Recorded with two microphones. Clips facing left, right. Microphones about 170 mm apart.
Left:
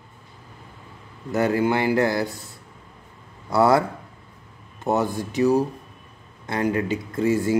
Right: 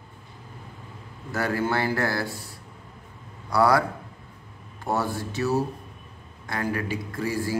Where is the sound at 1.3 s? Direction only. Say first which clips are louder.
Left 5 dB; 20° left (ahead or behind).